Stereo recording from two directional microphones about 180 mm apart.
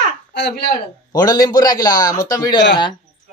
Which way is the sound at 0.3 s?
70° left (ahead or behind).